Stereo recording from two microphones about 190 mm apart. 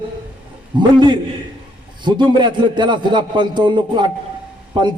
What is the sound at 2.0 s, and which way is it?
A man's voice, 25° right (ahead or behind).